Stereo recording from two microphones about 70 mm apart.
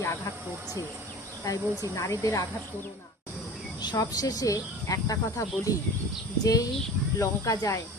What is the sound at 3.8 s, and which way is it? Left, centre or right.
Speech, left.